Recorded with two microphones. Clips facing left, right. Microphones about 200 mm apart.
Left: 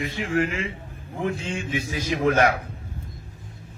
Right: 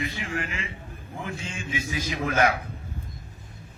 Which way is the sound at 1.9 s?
50° left (ahead or behind).